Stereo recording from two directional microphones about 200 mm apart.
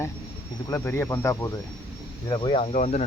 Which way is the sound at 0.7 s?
10° left (ahead or behind).